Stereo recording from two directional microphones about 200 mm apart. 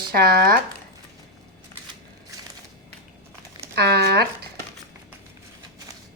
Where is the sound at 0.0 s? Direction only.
50° right (ahead or behind).